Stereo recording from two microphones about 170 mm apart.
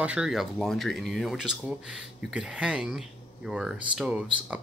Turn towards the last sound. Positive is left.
turn(degrees=-5)  # may be behind; listen again after turning